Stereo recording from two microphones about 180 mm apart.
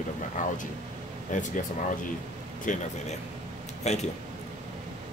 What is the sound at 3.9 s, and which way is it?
Speech, 35° left (ahead or behind).